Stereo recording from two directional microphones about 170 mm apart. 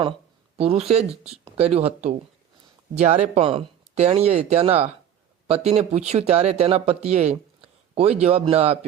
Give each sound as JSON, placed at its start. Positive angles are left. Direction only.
{"t": 0.5, "sound": "speech", "side_deg": -35}